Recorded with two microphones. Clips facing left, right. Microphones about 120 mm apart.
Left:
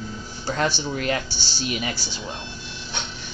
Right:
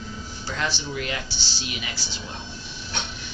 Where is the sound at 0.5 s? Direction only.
45° left (ahead or behind).